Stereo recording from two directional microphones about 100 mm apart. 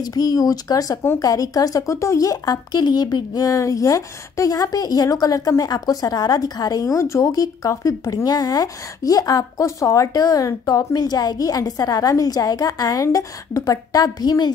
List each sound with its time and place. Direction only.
0.0 s speech: 40° left (ahead or behind)